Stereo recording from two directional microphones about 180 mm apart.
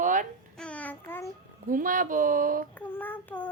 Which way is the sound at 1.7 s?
50° right (ahead or behind).